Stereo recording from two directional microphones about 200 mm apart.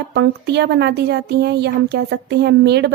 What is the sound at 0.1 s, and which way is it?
Speech, 55° right (ahead or behind).